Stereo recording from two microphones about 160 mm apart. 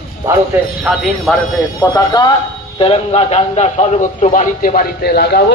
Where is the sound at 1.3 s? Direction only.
5° left (ahead or behind).